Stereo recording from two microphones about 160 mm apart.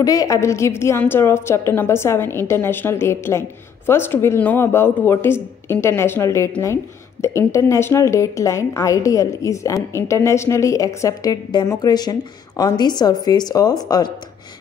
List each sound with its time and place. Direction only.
0.0 s a woman's voice: 20° left (ahead or behind)